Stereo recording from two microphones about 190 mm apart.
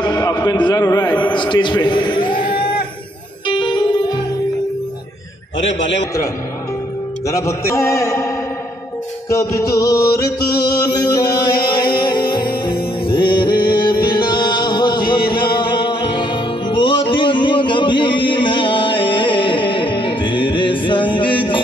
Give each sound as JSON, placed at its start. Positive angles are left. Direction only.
{"t": 0.0, "sound": "a sound", "side_deg": 20}
{"t": 3.4, "sound": "music", "side_deg": 25}
{"t": 7.2, "sound": "a man's voice", "side_deg": 15}
{"t": 9.3, "sound": "music", "side_deg": 15}